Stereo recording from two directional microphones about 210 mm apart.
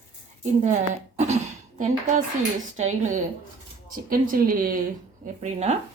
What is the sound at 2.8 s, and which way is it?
A woman's voice, 35° right (ahead or behind).